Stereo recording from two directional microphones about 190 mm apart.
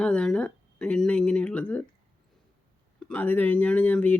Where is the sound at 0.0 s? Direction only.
5° left (ahead or behind).